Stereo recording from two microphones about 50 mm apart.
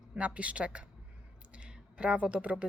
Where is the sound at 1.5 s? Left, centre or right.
Right.